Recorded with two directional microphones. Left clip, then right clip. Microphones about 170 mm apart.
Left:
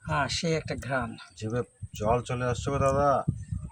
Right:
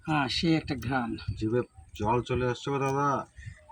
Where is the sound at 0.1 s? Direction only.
55° left (ahead or behind).